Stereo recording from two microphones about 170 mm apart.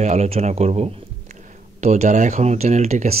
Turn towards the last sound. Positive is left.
turn(degrees=-40)  # may be behind; listen again after turning